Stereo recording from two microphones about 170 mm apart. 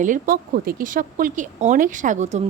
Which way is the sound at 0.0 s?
50° right (ahead or behind).